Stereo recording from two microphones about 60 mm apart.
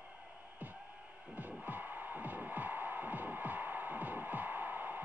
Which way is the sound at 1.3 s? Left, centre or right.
Right.